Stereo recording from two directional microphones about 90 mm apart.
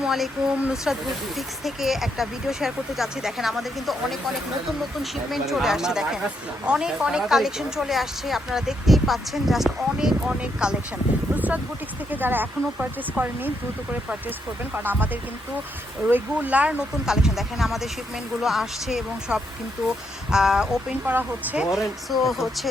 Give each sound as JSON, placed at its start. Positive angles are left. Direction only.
{"t": 0.0, "sound": "a sound", "side_deg": -5}
{"t": 0.6, "sound": "a woman's voice", "side_deg": -5}
{"t": 5.3, "sound": "a woman's voice", "side_deg": 0}
{"t": 14.8, "sound": "a woman's voice", "side_deg": -20}
{"t": 21.1, "sound": "speech", "side_deg": -20}
{"t": 21.6, "sound": "a woman's voice", "side_deg": -5}